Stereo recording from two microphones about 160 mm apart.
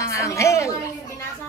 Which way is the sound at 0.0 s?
20° left (ahead or behind).